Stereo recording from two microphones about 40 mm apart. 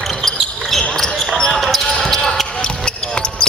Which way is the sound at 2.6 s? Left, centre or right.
Left.